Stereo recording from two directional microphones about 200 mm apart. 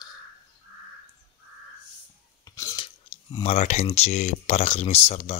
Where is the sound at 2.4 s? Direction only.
15° left (ahead or behind).